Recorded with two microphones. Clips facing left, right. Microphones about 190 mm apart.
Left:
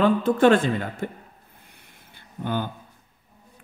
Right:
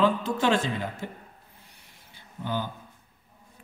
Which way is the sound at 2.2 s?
55° left (ahead or behind).